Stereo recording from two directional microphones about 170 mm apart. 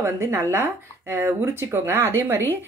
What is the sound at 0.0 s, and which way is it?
Speech, 15° right (ahead or behind).